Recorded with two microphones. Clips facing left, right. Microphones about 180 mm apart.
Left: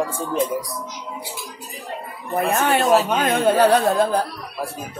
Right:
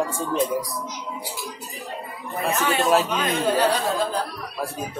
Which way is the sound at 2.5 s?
55° left (ahead or behind).